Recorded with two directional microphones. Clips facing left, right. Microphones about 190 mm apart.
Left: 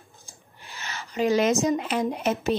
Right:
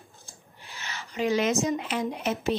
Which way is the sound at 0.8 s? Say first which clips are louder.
Left 3 dB; 45° left (ahead or behind).